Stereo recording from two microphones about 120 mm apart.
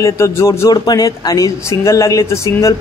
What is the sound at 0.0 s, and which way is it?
A man's voice, 25° left (ahead or behind).